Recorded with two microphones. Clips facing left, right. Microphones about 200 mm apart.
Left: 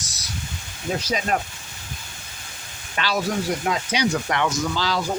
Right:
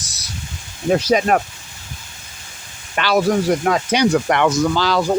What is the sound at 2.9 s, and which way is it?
Speech, 65° right (ahead or behind).